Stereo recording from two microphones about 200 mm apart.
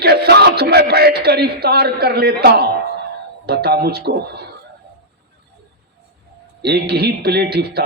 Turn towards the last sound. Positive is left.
turn(degrees=-50)  # may be behind; listen again after turning